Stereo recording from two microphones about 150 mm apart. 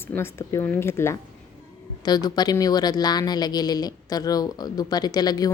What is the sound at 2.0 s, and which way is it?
Speech, 25° left (ahead or behind).